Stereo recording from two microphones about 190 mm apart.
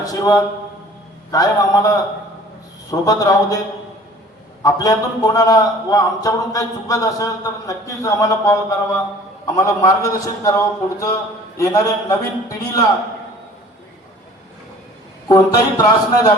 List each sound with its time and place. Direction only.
0.0 s a man's voice: 20° left (ahead or behind)
4.6 s a man's voice: 20° left (ahead or behind)
15.3 s a man's voice: 20° left (ahead or behind)